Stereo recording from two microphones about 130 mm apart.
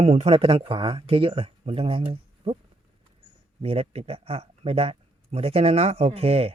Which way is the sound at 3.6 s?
50° right (ahead or behind).